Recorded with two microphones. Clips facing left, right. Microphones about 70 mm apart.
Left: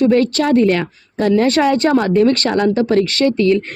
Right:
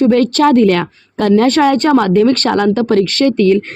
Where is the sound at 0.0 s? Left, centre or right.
Right.